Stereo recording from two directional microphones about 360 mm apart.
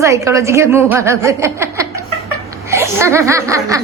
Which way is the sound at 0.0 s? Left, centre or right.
Centre.